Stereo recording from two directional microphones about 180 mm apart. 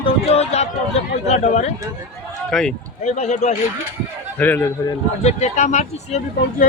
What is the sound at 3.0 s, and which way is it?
Speech, 40° left (ahead or behind).